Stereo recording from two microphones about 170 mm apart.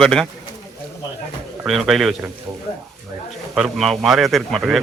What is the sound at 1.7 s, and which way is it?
Speech, centre (ahead or behind).